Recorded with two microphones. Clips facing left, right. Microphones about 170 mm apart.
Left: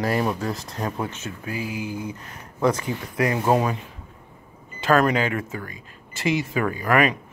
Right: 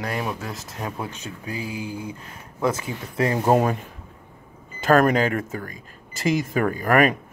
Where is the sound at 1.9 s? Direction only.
30° right (ahead or behind).